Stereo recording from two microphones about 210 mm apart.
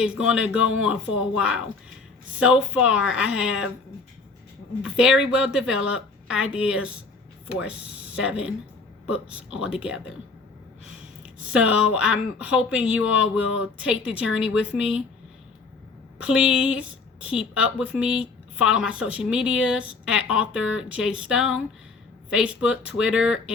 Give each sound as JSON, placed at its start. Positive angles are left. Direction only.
{"t": 0.0, "sound": "speech", "side_deg": -5}
{"t": 4.8, "sound": "speech", "side_deg": -5}
{"t": 11.2, "sound": "speech", "side_deg": -5}
{"t": 16.1, "sound": "a woman's voice", "side_deg": -5}